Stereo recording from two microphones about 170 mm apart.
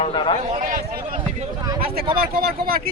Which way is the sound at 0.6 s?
55° right (ahead or behind).